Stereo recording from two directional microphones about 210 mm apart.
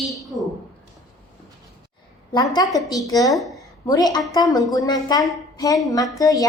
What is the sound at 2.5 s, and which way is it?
A woman's voice, 15° left (ahead or behind).